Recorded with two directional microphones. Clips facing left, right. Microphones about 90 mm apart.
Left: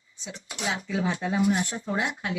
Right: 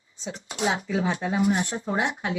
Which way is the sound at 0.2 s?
35° right (ahead or behind).